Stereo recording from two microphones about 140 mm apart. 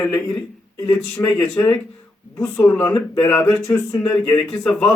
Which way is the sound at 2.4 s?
15° left (ahead or behind).